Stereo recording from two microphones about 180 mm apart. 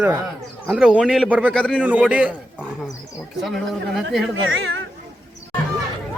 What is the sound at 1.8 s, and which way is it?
Speech, 10° right (ahead or behind).